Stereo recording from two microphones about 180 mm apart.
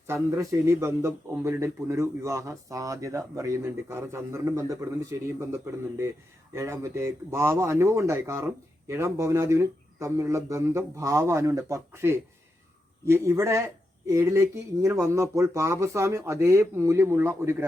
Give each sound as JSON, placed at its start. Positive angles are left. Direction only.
{"t": 0.1, "sound": "a man's voice", "side_deg": -15}